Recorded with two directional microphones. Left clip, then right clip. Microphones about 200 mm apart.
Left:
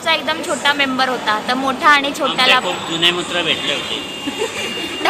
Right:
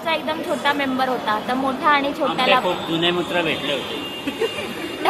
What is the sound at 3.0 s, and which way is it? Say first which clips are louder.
Speech: left 6 dB; 40° right (ahead or behind).